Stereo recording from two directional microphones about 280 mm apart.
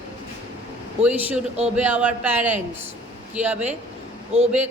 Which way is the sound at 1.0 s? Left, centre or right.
Centre.